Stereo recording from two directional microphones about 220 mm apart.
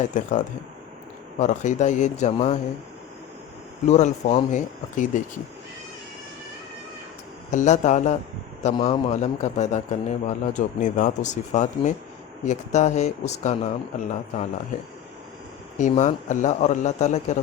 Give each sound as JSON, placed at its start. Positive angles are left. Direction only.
{"t": 0.0, "sound": "a man's voice", "side_deg": 35}
{"t": 3.8, "sound": "a man's voice", "side_deg": 30}
{"t": 7.5, "sound": "a man's voice", "side_deg": 35}
{"t": 15.8, "sound": "a man's voice", "side_deg": 35}